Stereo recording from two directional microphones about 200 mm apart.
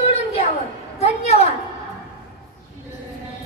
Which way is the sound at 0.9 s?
30° left (ahead or behind).